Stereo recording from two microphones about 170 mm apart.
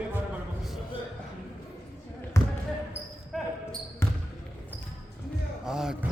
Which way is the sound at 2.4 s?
15° left (ahead or behind).